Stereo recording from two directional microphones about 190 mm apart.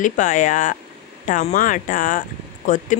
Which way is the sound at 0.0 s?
45° left (ahead or behind).